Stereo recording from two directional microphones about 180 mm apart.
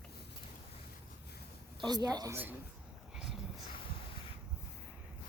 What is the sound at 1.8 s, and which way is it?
Speech, 25° right (ahead or behind).